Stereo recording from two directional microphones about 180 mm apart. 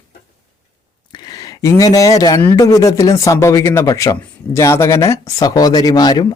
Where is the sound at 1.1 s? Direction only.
20° left (ahead or behind).